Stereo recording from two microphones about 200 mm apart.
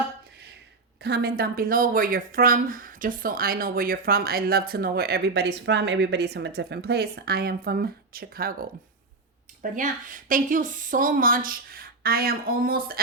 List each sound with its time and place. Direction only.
1.0 s speech: 50° right (ahead or behind)
9.7 s speech: 40° right (ahead or behind)